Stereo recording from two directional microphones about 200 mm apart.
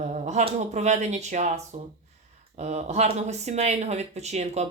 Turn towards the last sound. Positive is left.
turn(degrees=-35)  # may be behind; listen again after turning